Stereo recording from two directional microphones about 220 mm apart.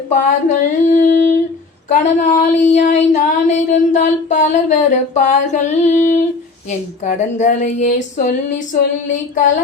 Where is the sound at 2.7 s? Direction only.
35° left (ahead or behind).